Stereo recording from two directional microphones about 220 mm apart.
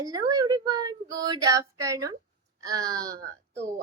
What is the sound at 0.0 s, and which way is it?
Speech, 15° right (ahead or behind).